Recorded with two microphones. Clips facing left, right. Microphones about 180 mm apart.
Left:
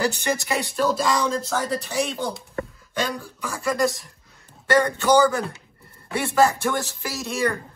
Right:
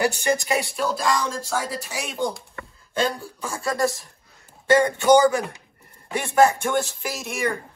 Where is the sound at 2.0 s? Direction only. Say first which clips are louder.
Right 2 dB; 15° right (ahead or behind).